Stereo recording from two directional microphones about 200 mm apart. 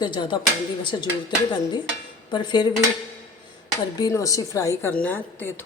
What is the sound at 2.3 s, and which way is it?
Speech, 20° left (ahead or behind).